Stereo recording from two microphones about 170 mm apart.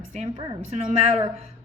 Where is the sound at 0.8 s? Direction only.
40° right (ahead or behind).